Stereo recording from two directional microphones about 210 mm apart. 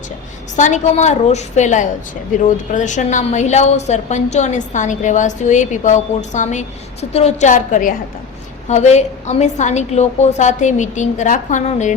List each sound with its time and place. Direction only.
0.5 s a woman's voice: 35° left (ahead or behind)